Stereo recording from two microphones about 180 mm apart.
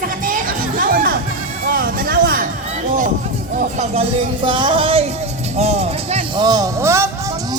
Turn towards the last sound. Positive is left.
turn(degrees=-15)  # may be behind; listen again after turning